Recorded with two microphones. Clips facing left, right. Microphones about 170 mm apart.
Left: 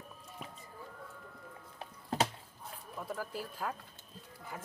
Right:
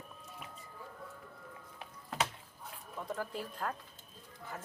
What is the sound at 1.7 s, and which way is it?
Music, 35° left (ahead or behind).